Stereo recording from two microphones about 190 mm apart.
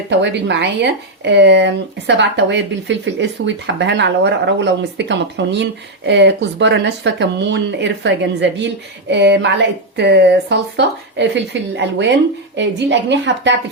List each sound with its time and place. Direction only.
0.1 s speech: 70° right (ahead or behind)